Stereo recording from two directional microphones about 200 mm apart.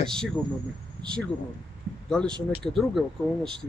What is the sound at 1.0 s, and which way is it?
Speech, 5° left (ahead or behind).